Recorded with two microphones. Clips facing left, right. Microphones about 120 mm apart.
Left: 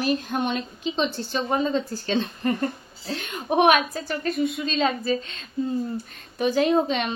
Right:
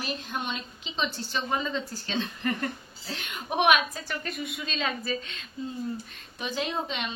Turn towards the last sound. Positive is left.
turn(degrees=50)  # may be behind; listen again after turning